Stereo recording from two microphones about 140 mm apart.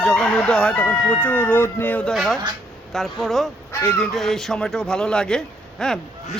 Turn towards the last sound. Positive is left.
turn(degrees=5)  # may be behind; listen again after turning